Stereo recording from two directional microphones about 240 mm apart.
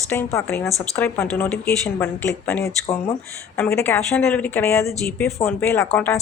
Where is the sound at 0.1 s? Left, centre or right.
Centre.